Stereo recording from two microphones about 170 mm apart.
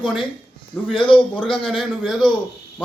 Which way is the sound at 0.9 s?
30° left (ahead or behind).